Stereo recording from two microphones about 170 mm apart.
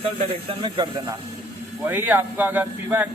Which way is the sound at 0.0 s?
35° right (ahead or behind).